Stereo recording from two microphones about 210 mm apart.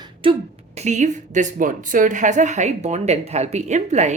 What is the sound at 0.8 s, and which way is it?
A woman's voice, 35° right (ahead or behind).